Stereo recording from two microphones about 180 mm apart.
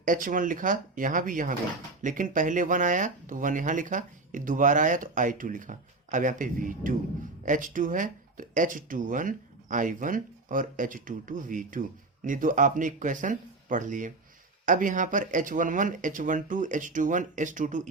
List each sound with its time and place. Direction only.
0.0 s speech: 50° right (ahead or behind)